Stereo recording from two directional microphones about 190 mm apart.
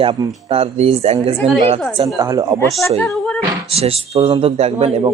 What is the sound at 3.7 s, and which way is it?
Speech, 30° right (ahead or behind).